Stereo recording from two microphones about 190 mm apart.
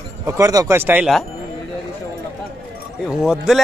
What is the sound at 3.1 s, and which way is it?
Speech, 5° right (ahead or behind).